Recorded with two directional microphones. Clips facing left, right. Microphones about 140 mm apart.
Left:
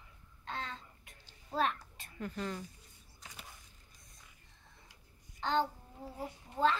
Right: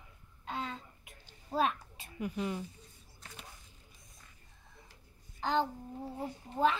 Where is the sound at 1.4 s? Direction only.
10° right (ahead or behind).